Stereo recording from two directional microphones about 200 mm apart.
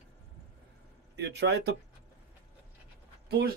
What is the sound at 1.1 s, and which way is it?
Speech, 60° right (ahead or behind).